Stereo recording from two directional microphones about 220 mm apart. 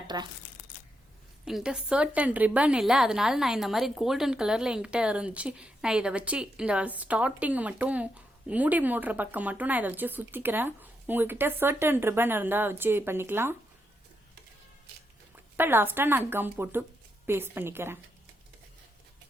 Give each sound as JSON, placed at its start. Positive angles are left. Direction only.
{"t": 0.1, "sound": "speech", "side_deg": -20}
{"t": 1.5, "sound": "a woman's voice", "side_deg": -5}
{"t": 15.5, "sound": "a woman's voice", "side_deg": -10}